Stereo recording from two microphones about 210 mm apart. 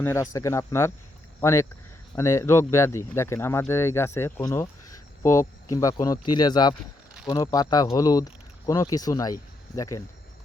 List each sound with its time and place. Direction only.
0.0 s speech: 15° left (ahead or behind)